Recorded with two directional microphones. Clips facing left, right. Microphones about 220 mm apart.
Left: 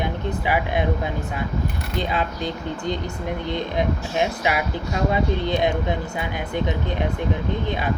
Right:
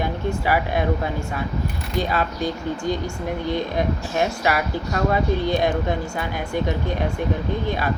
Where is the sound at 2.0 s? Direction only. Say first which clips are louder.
Right 2 dB; 20° left (ahead or behind).